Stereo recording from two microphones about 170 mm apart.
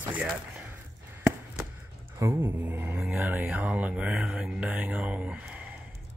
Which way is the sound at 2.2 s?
10° right (ahead or behind).